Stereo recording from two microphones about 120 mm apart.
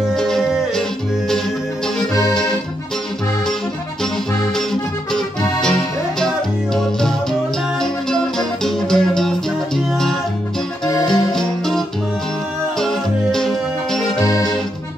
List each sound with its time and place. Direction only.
0.1 s music: 5° left (ahead or behind)
5.1 s music: 5° left (ahead or behind)
11.1 s music: 5° left (ahead or behind)
14.2 s accordion: 30° left (ahead or behind)